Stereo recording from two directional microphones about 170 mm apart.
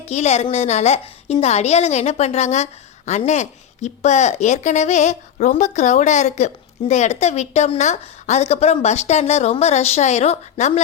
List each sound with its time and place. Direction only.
0.1 s a woman's voice: 40° left (ahead or behind)